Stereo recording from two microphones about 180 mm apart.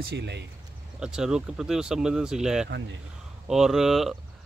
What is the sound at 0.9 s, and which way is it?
Speech, 5° right (ahead or behind).